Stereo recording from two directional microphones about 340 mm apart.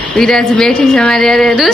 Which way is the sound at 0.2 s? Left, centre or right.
Centre.